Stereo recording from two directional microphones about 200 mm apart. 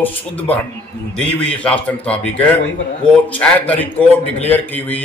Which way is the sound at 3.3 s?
5° left (ahead or behind).